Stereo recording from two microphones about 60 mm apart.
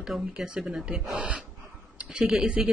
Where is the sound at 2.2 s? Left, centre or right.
Centre.